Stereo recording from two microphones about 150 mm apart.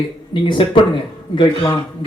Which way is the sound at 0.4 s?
35° left (ahead or behind).